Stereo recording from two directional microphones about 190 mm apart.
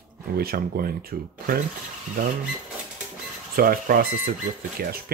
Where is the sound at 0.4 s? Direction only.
50° right (ahead or behind).